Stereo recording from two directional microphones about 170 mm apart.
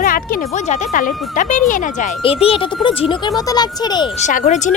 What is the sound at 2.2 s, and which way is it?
Speech, 35° left (ahead or behind).